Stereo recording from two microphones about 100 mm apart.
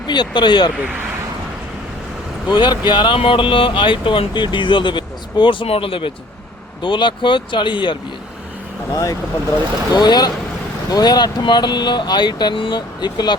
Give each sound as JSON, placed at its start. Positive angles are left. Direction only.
{"t": 0.1, "sound": "speech", "side_deg": 50}
{"t": 2.5, "sound": "speech", "side_deg": 50}
{"t": 3.2, "sound": "speech", "side_deg": 60}
{"t": 6.8, "sound": "speech", "side_deg": 55}
{"t": 8.9, "sound": "speech", "side_deg": 35}